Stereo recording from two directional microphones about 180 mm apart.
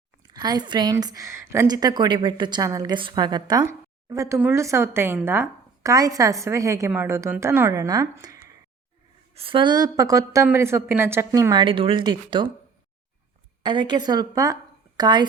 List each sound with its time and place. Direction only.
0.3 s a woman's voice: 25° right (ahead or behind)
13.6 s a woman's voice: 25° right (ahead or behind)